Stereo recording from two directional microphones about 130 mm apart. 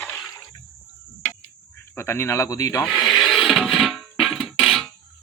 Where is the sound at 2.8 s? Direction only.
Centre (ahead or behind).